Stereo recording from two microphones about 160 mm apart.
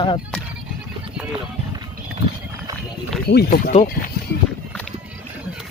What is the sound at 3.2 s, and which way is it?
Speech, 90° left.